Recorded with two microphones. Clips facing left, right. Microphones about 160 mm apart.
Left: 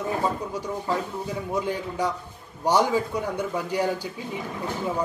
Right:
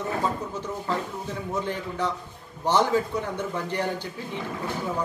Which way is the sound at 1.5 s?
10° left (ahead or behind).